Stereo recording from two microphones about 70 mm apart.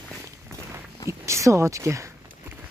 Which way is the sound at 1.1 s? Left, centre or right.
Right.